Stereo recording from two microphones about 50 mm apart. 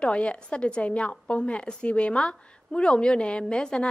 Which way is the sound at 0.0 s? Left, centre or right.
Left.